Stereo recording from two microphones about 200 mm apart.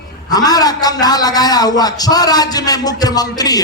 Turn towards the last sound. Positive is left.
turn(degrees=20)  # may be behind; listen again after turning